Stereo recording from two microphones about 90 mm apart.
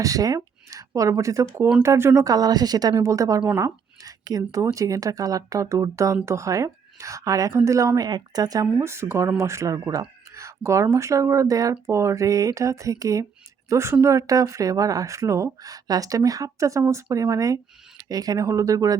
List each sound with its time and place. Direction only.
0.0 s speech: 40° right (ahead or behind)
2.3 s a woman's voice: 45° right (ahead or behind)
8.6 s speech: 30° right (ahead or behind)